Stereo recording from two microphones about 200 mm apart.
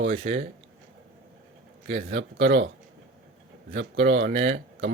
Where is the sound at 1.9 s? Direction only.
55° right (ahead or behind).